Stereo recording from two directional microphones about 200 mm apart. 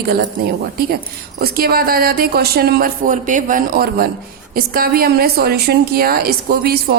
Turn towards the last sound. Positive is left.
turn(degrees=-50)  # may be behind; listen again after turning